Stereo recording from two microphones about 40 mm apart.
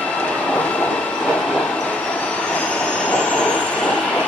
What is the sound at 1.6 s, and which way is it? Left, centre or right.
Train, left.